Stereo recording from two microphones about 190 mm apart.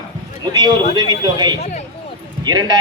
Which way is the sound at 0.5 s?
20° right (ahead or behind).